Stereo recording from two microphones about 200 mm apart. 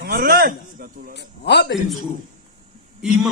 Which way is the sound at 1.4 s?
55° left (ahead or behind).